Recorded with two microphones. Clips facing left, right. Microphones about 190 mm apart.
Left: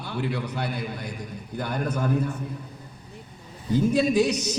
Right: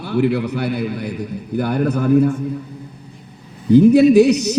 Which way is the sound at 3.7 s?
65° right (ahead or behind).